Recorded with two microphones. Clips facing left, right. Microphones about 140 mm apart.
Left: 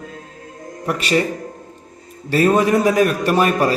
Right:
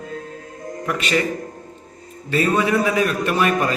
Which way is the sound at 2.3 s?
45° left (ahead or behind).